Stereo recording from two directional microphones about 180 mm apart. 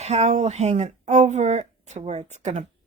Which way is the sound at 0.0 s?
35° right (ahead or behind).